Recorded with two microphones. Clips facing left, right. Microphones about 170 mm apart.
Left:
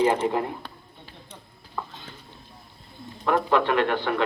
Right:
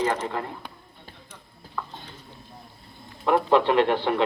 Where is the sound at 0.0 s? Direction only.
10° left (ahead or behind).